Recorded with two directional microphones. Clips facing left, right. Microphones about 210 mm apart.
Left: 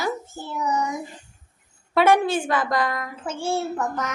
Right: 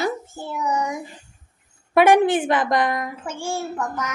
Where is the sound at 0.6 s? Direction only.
10° right (ahead or behind).